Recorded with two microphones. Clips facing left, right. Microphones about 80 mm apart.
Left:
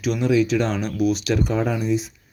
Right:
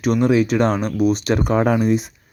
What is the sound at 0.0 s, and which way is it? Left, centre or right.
Speech, right.